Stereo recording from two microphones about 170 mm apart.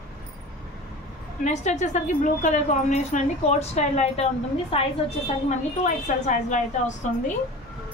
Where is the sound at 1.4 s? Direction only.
45° left (ahead or behind).